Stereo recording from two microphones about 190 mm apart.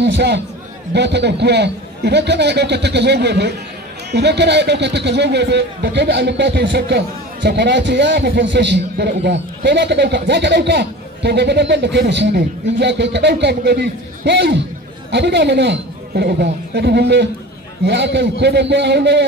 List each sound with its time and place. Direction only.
0.0 s a man's voice: 65° right (ahead or behind)